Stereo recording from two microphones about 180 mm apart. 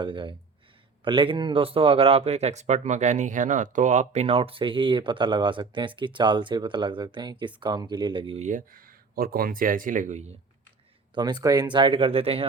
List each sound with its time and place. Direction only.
0.0 s speech: 25° right (ahead or behind)
8.4 s speech: 50° right (ahead or behind)
11.1 s speech: 25° right (ahead or behind)